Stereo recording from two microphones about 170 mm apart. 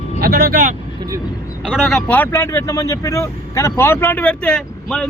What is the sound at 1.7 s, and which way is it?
Speech, centre (ahead or behind).